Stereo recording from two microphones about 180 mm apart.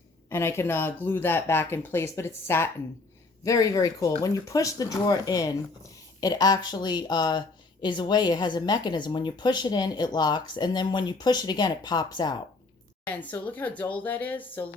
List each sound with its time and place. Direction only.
0.3 s speech: 15° left (ahead or behind)
13.1 s speech: 10° left (ahead or behind)